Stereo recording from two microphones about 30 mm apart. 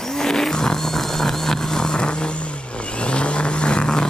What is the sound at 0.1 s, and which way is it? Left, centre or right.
Vehicle, centre.